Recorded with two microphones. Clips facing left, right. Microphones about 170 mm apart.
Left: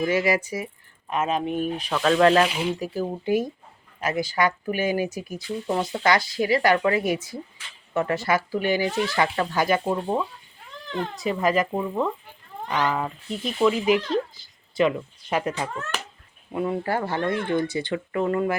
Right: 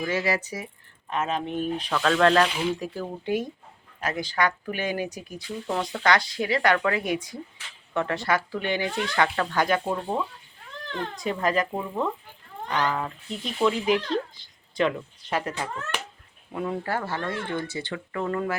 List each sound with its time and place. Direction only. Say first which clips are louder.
0.0 s speech: left 4 dB; 10° left (ahead or behind)
4.0 s speech: left 3 dB; 10° left (ahead or behind)